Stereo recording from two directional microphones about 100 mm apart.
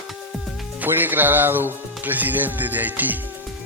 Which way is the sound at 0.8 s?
20° right (ahead or behind).